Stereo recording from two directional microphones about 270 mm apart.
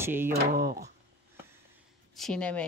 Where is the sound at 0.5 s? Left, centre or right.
Right.